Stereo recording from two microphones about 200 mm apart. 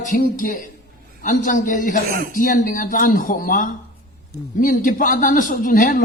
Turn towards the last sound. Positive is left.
turn(degrees=40)  # may be behind; listen again after turning